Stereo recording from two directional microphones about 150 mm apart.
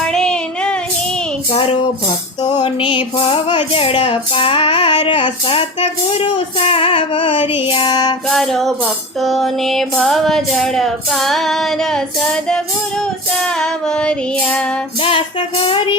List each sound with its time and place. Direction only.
0.0 s female singing: 5° left (ahead or behind)
2.4 s female singing: 30° left (ahead or behind)
7.7 s music: 35° left (ahead or behind)
8.3 s child singing: 5° left (ahead or behind)
15.0 s female singing: 35° left (ahead or behind)